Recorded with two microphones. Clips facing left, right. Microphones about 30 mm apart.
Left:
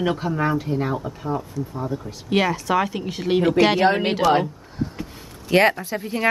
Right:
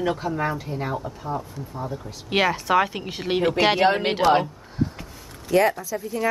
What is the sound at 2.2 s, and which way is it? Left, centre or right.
Speech, centre.